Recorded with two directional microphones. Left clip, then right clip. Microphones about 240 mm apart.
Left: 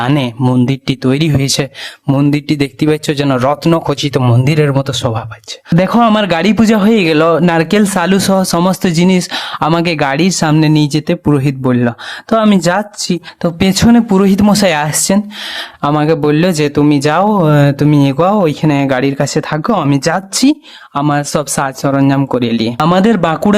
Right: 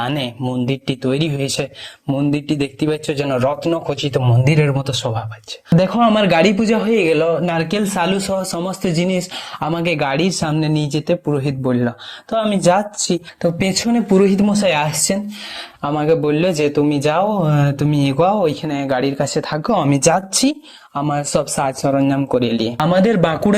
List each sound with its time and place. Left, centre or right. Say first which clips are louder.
0.6 s speech: left 6 dB; centre
2.5 s speech: left 6 dB; left